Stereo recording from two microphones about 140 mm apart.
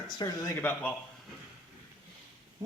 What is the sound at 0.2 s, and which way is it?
Speech, 30° left (ahead or behind).